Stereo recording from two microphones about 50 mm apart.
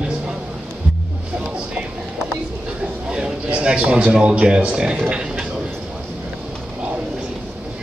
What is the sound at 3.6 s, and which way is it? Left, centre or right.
A man's voice, right.